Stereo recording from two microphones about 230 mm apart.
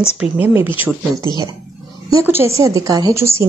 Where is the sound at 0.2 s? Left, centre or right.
Centre.